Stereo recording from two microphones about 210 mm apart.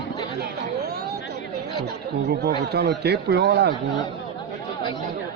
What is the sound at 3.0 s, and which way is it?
Speech, 50° right (ahead or behind).